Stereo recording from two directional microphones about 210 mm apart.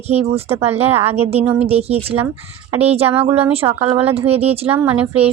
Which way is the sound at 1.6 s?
30° right (ahead or behind).